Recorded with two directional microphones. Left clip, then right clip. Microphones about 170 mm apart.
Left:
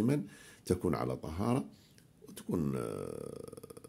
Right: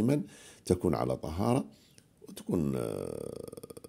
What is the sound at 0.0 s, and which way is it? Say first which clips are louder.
Speech: right 3 dB; 30° right (ahead or behind).